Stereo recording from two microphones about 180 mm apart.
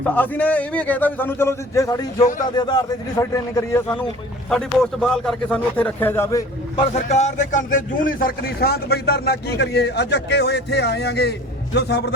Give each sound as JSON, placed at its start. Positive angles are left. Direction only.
{"t": 0.0, "sound": "a man's voice", "side_deg": 10}
{"t": 4.4, "sound": "a man's voice", "side_deg": 5}
{"t": 6.7, "sound": "a man's voice", "side_deg": 35}